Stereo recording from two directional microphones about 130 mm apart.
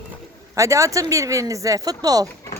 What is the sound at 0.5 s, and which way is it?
Speech, 25° right (ahead or behind).